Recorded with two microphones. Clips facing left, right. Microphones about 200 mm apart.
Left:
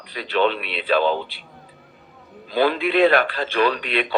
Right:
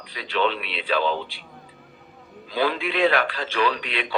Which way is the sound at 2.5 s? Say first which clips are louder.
Left 5 dB; 55° left (ahead or behind).